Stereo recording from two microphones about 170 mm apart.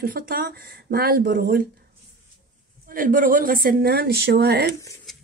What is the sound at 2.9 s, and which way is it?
Speech, 55° right (ahead or behind).